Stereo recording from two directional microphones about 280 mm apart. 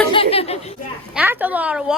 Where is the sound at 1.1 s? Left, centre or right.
Centre.